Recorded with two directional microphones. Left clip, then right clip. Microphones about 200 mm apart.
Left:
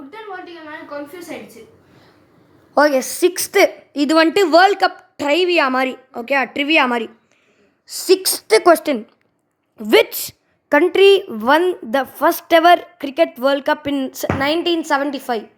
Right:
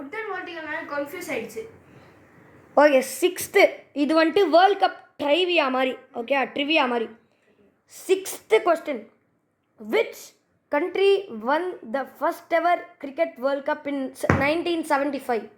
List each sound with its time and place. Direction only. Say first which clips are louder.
2.7 s a woman's voice: left 3 dB; 15° left (ahead or behind)
8.6 s a woman's voice: left 10 dB; 40° left (ahead or behind); by 15.4 s 25° left (ahead or behind)